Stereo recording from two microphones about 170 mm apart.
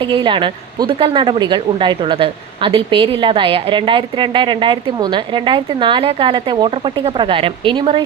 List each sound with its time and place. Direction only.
0.0 s a woman's voice: 30° right (ahead or behind)